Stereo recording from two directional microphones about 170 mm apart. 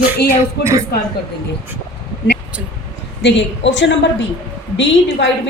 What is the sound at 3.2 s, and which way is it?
Speech, 90° left.